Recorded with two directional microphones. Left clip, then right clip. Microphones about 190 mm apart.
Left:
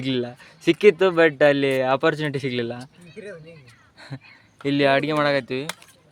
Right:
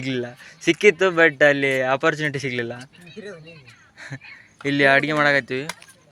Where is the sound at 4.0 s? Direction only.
10° left (ahead or behind).